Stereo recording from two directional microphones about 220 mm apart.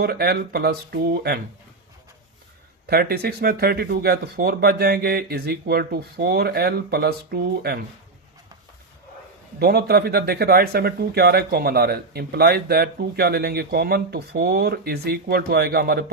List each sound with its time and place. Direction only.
0.0 s speech: 45° right (ahead or behind)
2.8 s speech: 45° right (ahead or behind)
9.6 s speech: 45° right (ahead or behind)